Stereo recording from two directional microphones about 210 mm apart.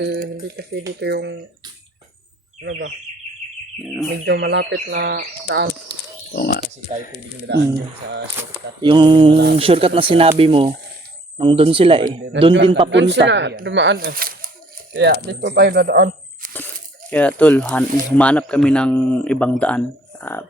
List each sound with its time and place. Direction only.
0.0 s speech: 45° right (ahead or behind)
2.6 s speech: 50° right (ahead or behind)
4.3 s speech: 55° right (ahead or behind)
6.3 s speech: 45° left (ahead or behind)
7.5 s speech: 55° right (ahead or behind)
8.8 s speech: 20° right (ahead or behind)
12.0 s speech: 55° right (ahead or behind)
12.6 s speech: 25° right (ahead or behind)
12.9 s speech: 55° right (ahead or behind)
17.1 s speech: 5° left (ahead or behind)